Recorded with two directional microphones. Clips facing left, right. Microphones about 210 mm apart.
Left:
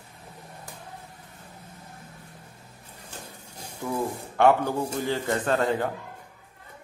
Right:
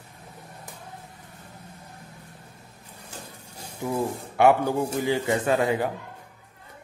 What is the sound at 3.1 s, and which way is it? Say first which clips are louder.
Speech: right 1 dB; 10° right (ahead or behind).